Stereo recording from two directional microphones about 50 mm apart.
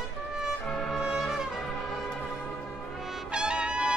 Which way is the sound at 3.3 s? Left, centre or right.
Centre.